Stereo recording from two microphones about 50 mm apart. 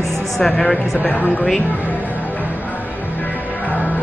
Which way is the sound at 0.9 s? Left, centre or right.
Left.